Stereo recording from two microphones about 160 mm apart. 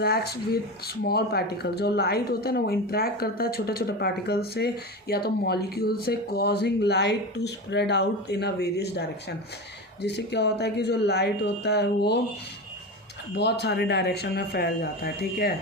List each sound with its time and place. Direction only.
0.0 s speech: 80° left
13.3 s speech: 90° left; by 15.5 s 75° left (ahead or behind)